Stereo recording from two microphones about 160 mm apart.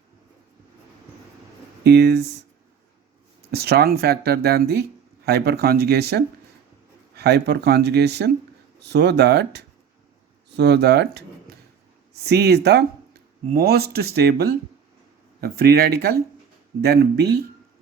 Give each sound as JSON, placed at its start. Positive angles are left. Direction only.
{"t": 1.8, "sound": "speech", "side_deg": -90}
{"t": 3.5, "sound": "speech", "side_deg": -80}
{"t": 13.5, "sound": "speech", "side_deg": -75}
{"t": 15.4, "sound": "speech", "side_deg": -75}